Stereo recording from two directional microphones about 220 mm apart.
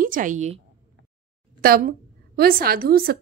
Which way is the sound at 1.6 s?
40° right (ahead or behind).